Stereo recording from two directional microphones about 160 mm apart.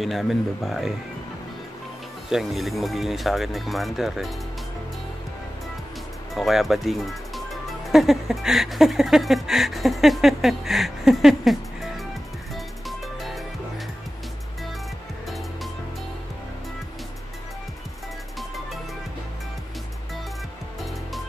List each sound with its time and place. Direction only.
0.0 s speech: centre (ahead or behind)
2.2 s speech: centre (ahead or behind)
6.3 s speech: centre (ahead or behind)
12.5 s music: centre (ahead or behind)